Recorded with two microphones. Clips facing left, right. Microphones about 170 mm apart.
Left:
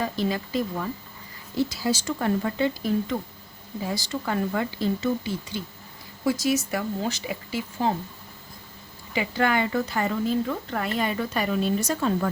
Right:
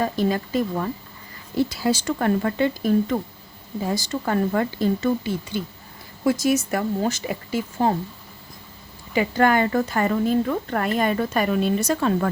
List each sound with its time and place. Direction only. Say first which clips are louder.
0.0 s speech: right 4 dB; 50° right (ahead or behind)
9.1 s speech: right 5 dB; 45° right (ahead or behind); by 12.3 s 70° right (ahead or behind)